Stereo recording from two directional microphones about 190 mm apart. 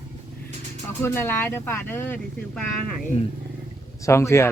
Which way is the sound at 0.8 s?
15° left (ahead or behind).